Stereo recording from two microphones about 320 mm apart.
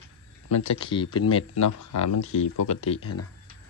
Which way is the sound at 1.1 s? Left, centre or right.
Left.